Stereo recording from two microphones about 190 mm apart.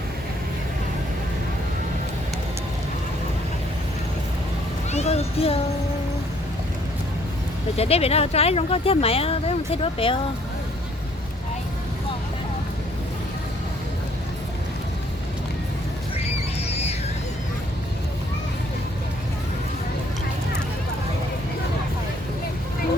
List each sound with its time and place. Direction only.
4.9 s a child's voice: 35° left (ahead or behind)
7.8 s speech: 30° left (ahead or behind)
16.6 s a sound: 35° left (ahead or behind)